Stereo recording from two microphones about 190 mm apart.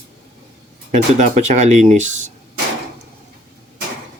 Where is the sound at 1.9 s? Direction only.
40° right (ahead or behind).